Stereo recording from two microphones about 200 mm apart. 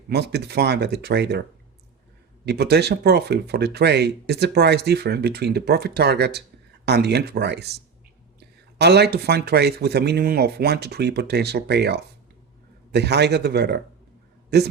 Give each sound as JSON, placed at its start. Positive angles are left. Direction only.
{"t": 0.1, "sound": "speech", "side_deg": -55}
{"t": 2.5, "sound": "speech", "side_deg": -55}